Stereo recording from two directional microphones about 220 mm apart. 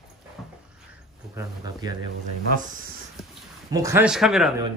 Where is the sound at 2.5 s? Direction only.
35° right (ahead or behind).